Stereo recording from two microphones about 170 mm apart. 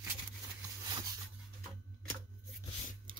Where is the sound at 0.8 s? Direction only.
20° right (ahead or behind).